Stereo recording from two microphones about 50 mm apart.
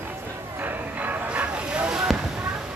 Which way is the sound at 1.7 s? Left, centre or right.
Centre.